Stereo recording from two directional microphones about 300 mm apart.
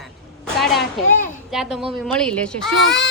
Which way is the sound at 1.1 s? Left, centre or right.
Left.